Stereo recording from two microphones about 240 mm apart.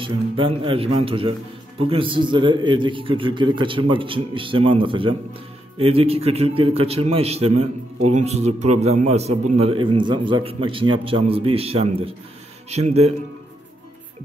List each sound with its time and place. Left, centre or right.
0.0 s a man's voice: right